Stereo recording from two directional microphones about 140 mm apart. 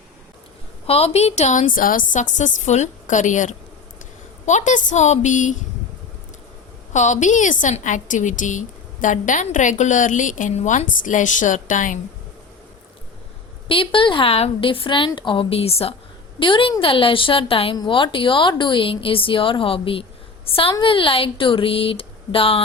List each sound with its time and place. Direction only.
0.9 s a woman's voice: 45° left (ahead or behind)
1.7 s a woman's voice: 75° left (ahead or behind)
6.9 s a woman's voice: 60° left (ahead or behind)
13.7 s speech: 40° left (ahead or behind)